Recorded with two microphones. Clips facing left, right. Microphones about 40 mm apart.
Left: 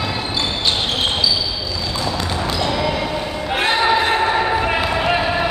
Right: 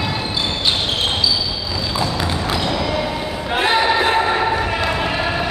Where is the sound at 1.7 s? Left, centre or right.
Centre.